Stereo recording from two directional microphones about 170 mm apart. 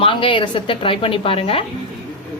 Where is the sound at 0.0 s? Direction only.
30° left (ahead or behind).